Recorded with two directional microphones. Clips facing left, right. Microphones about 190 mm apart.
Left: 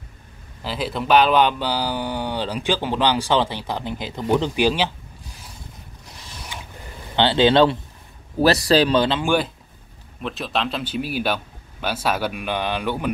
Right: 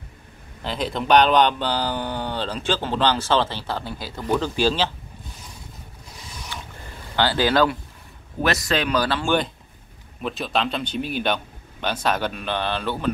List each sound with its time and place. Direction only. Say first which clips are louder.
0.7 s speech: even; 5° left (ahead or behind)
6.5 s a sound: even; 15° left (ahead or behind)
7.2 s speech: left 4 dB; 25° left (ahead or behind)
10.2 s speech: right 1 dB; centre (ahead or behind)